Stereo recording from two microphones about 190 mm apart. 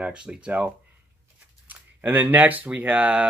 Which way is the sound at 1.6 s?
10° right (ahead or behind).